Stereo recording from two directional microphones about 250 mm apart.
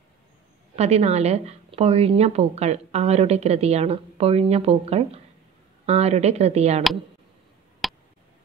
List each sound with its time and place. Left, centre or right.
0.7 s speech: right
7.8 s tick: centre